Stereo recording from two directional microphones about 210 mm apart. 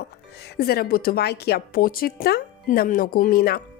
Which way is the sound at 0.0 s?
55° left (ahead or behind).